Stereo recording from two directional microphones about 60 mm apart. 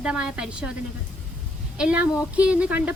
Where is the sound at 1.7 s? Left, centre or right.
Right.